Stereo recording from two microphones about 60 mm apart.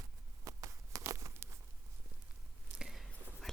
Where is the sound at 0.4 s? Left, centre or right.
Right.